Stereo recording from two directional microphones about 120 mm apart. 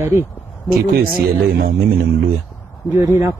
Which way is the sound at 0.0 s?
20° right (ahead or behind).